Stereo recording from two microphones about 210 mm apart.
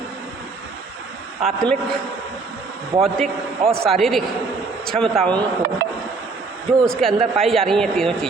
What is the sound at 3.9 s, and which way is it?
Speech, centre (ahead or behind).